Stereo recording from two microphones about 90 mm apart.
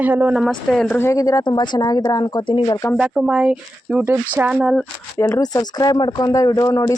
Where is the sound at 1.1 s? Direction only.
40° left (ahead or behind).